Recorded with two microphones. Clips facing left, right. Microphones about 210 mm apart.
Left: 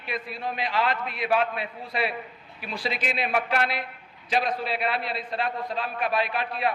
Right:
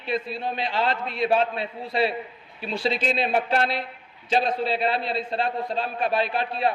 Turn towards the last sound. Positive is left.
turn(degrees=-30)  # may be behind; listen again after turning